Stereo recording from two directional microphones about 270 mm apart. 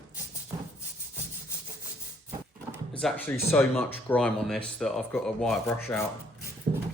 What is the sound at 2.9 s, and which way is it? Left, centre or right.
Speech, centre.